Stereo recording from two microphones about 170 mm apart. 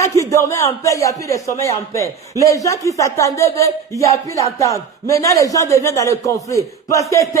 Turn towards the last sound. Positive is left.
turn(degrees=20)  # may be behind; listen again after turning